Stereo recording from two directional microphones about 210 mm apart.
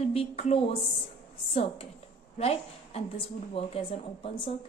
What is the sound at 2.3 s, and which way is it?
A woman's voice, 30° left (ahead or behind).